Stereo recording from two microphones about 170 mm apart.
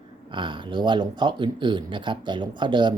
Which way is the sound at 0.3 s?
30° right (ahead or behind).